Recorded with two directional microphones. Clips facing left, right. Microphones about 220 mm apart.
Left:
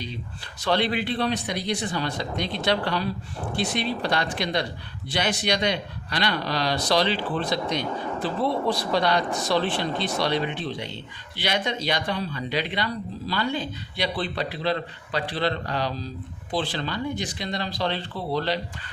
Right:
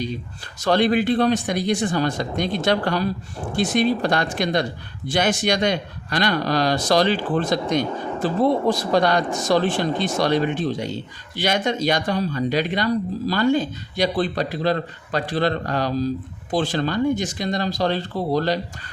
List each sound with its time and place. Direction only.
0.6 s speech: 45° right (ahead or behind)